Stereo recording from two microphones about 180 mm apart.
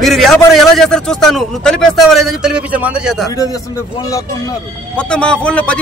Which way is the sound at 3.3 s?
20° left (ahead or behind).